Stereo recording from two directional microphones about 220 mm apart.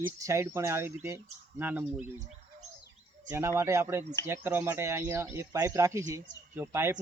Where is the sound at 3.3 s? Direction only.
10° right (ahead or behind).